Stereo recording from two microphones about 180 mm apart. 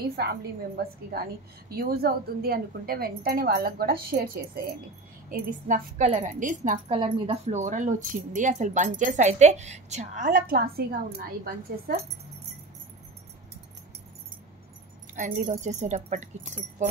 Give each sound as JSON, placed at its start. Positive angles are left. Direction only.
{"t": 0.1, "sound": "a woman's voice", "side_deg": -65}
{"t": 7.0, "sound": "speech", "side_deg": -35}
{"t": 15.1, "sound": "speech", "side_deg": -45}